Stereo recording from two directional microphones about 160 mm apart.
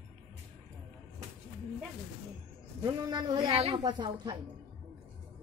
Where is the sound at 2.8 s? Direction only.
25° right (ahead or behind).